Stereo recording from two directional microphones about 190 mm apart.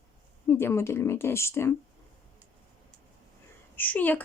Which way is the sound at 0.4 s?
15° left (ahead or behind).